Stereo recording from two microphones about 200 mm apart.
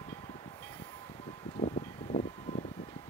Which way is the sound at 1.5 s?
40° left (ahead or behind).